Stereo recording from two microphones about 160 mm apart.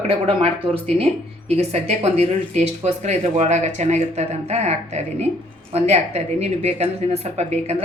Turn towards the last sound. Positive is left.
turn(degrees=-40)  # may be behind; listen again after turning